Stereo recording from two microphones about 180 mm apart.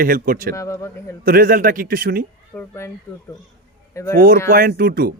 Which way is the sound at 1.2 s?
55° right (ahead or behind).